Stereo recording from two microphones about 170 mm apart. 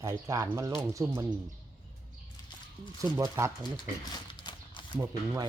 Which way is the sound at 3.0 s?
15° right (ahead or behind).